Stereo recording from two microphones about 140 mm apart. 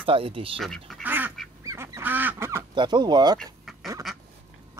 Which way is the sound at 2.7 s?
30° right (ahead or behind).